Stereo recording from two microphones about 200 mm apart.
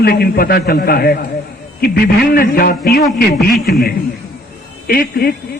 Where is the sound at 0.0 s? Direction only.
50° left (ahead or behind).